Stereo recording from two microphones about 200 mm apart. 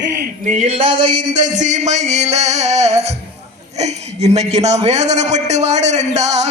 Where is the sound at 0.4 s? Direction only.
35° right (ahead or behind).